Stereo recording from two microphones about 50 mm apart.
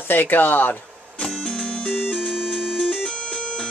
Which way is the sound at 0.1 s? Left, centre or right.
Left.